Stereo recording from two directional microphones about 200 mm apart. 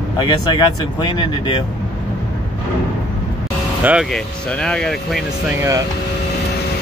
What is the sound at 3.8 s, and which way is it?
Speech, 5° right (ahead or behind).